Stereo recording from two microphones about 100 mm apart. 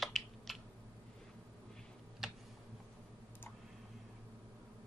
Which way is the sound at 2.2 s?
5° right (ahead or behind).